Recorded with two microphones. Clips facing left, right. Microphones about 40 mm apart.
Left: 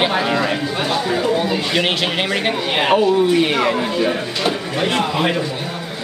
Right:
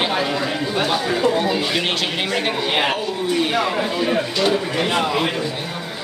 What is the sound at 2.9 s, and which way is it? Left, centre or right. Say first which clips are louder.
Speech: left 7 dB; left.